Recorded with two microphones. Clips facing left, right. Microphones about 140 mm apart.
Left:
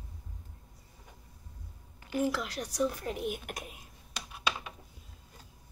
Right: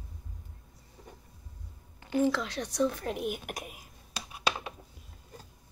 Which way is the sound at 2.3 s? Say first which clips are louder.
Right 3 dB; 10° left (ahead or behind).